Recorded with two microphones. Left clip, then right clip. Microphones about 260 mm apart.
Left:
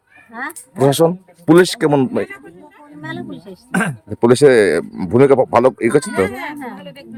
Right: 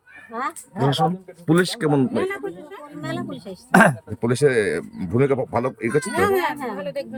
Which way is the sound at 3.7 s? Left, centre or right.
Centre.